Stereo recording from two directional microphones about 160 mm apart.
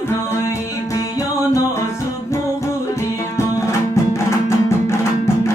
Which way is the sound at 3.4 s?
20° left (ahead or behind).